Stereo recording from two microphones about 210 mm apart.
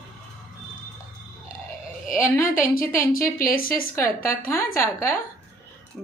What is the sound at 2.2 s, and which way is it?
Speech, 10° left (ahead or behind).